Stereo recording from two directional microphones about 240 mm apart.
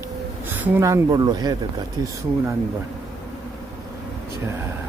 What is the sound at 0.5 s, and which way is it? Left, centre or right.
Speech, centre.